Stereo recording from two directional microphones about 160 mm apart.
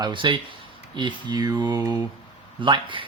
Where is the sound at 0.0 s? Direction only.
30° right (ahead or behind).